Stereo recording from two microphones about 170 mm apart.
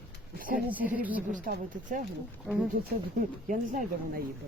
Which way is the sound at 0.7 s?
10° right (ahead or behind).